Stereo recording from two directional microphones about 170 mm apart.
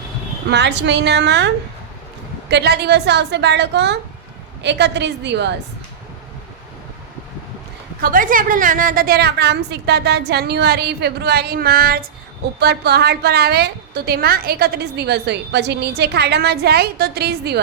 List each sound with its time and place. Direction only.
0.5 s a woman's voice: 90° right
2.5 s a woman's voice: 75° right (ahead or behind)
8.0 s a woman's voice: 55° right (ahead or behind)
12.5 s a woman's voice: 70° right (ahead or behind)